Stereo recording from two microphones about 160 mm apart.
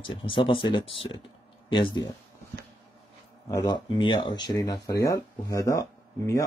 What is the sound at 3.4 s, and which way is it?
Speech, 25° left (ahead or behind).